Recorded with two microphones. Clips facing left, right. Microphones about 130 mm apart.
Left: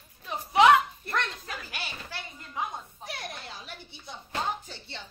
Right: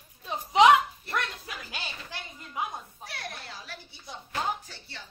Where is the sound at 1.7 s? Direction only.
15° right (ahead or behind).